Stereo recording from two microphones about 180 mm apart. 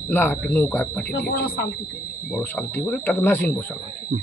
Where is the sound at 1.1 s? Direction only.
60° left (ahead or behind).